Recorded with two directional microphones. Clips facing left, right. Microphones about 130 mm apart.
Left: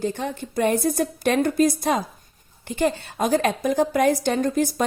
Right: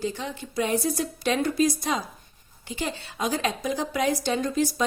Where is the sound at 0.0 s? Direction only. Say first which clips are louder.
Left 4 dB; 50° left (ahead or behind).